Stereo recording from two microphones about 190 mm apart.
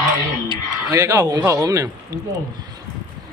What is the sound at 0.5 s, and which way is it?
Speech, 20° right (ahead or behind).